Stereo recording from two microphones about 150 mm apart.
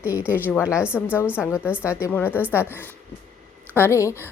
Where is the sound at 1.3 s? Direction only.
15° left (ahead or behind).